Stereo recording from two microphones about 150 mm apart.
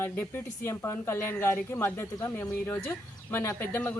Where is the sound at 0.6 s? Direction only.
15° left (ahead or behind).